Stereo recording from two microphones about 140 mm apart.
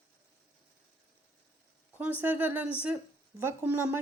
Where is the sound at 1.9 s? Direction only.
15° right (ahead or behind).